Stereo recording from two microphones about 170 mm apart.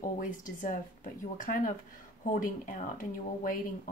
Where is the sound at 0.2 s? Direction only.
50° left (ahead or behind).